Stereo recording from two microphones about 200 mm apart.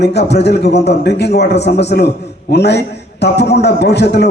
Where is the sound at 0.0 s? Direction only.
55° left (ahead or behind).